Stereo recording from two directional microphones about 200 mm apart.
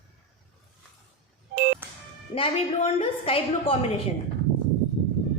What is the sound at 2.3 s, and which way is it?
A woman's voice, 30° left (ahead or behind).